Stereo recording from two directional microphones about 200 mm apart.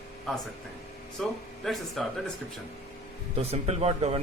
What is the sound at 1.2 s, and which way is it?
Speech, centre (ahead or behind).